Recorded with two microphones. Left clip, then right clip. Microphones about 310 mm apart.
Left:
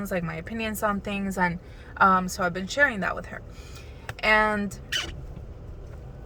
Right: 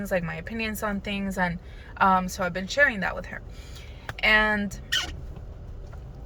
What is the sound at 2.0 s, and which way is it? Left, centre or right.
Speech, centre.